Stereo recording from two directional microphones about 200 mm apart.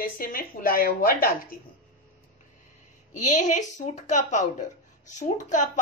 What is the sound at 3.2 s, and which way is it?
A woman's voice, 40° left (ahead or behind).